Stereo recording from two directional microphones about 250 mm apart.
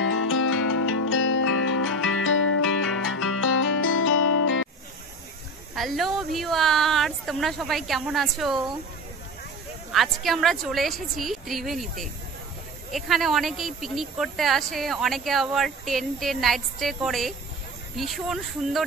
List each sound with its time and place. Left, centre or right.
0.0 s music: left
5.8 s speech: centre
9.9 s speech: centre
12.9 s speech: centre